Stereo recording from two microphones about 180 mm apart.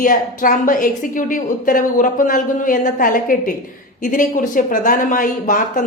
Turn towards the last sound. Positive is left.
turn(degrees=45)  # may be behind; listen again after turning